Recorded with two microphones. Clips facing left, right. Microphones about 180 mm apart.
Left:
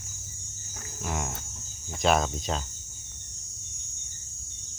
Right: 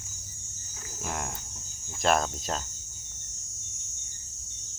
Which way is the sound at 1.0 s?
Centre (ahead or behind).